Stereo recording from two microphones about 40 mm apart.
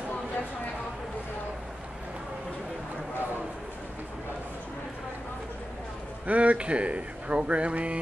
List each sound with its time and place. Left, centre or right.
6.2 s speech: right